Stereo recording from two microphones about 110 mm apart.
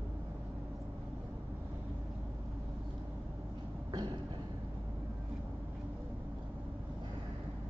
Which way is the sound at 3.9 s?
40° right (ahead or behind).